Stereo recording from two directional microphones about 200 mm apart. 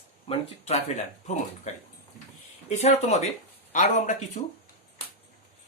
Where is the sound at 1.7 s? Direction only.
35° left (ahead or behind).